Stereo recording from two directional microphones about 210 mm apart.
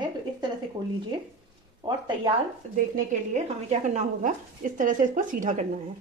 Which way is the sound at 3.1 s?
35° right (ahead or behind).